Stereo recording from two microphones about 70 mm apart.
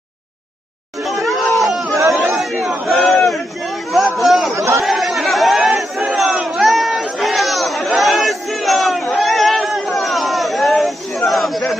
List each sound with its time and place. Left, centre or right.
1.0 s chatter: centre
2.3 s a sound: centre
4.5 s chatter: right
4.8 s chatter: centre
6.1 s crowd: centre
6.7 s chatter: centre